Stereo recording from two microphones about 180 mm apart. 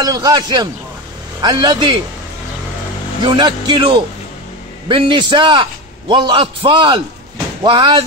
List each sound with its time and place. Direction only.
0.0 s a man's voice: 20° right (ahead or behind)
3.3 s a man's voice: 25° right (ahead or behind)